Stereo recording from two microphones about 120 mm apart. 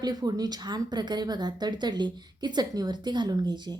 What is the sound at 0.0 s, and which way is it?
A woman's voice, 35° right (ahead or behind).